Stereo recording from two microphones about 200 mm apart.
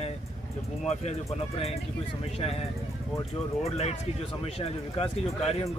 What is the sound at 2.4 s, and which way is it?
Speech, 30° left (ahead or behind).